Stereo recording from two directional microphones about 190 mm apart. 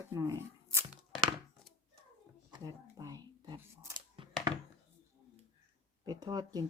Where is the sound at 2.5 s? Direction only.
20° right (ahead or behind).